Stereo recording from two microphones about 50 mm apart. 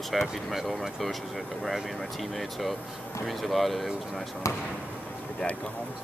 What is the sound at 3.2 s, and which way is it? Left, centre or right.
Speech, centre.